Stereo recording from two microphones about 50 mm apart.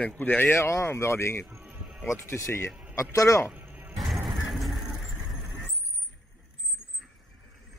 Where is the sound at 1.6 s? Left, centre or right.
Centre.